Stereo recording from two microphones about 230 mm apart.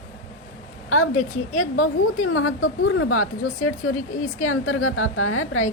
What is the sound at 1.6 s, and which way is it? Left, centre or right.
A woman's voice, left.